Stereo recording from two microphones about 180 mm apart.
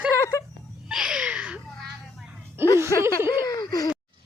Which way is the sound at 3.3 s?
20° left (ahead or behind).